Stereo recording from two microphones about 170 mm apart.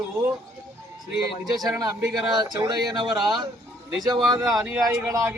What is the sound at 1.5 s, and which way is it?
Speech, 20° right (ahead or behind).